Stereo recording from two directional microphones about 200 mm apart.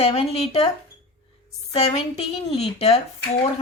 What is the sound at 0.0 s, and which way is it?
Speech, 30° left (ahead or behind).